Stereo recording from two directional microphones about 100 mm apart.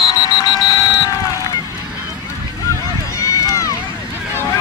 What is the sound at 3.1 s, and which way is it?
Run, 30° left (ahead or behind).